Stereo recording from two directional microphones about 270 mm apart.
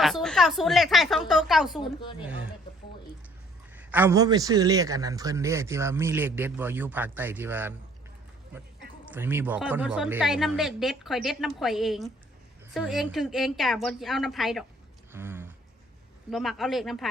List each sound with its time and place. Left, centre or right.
0.0 s a woman's voice: centre
1.8 s a woman's voice: centre
3.8 s a man's voice: centre
9.0 s a woman's voice: centre
15.1 s a sound: centre
16.3 s a woman's voice: centre